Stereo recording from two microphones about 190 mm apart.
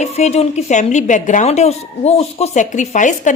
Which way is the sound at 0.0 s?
35° left (ahead or behind).